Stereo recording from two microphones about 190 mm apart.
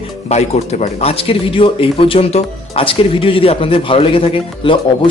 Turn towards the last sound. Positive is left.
turn(degrees=25)  # may be behind; listen again after turning